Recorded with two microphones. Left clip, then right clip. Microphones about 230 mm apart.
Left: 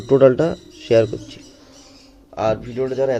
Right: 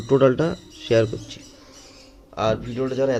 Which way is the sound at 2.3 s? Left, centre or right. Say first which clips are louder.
Left 3 dB; left.